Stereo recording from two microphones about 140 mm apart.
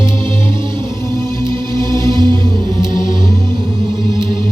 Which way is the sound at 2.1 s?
35° right (ahead or behind).